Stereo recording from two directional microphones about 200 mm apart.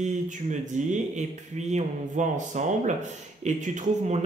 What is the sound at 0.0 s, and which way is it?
Speech, 35° right (ahead or behind).